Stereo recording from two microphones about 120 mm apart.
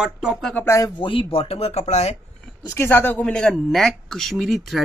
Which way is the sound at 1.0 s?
45° left (ahead or behind).